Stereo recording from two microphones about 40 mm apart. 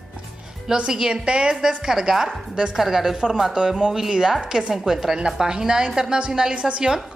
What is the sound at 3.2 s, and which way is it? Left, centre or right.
A woman's voice, right.